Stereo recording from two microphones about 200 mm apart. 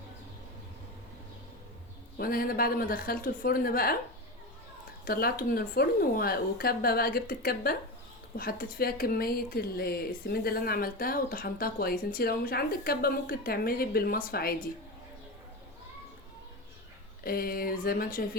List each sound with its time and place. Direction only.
2.1 s speech: 45° left (ahead or behind)
5.0 s speech: 50° left (ahead or behind)
17.2 s speech: 50° left (ahead or behind)